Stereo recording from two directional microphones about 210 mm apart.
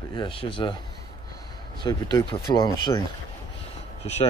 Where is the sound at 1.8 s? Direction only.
20° left (ahead or behind).